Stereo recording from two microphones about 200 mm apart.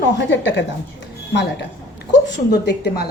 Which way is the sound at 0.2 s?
65° left (ahead or behind).